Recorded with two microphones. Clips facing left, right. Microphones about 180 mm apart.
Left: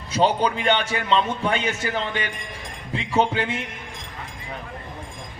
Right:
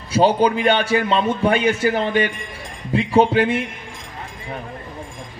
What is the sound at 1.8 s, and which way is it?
Speech, 40° right (ahead or behind).